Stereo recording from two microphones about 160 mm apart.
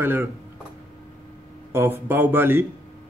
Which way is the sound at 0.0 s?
15° right (ahead or behind).